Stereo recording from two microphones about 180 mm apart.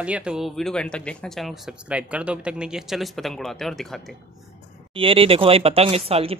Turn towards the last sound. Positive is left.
turn(degrees=-35)  # may be behind; listen again after turning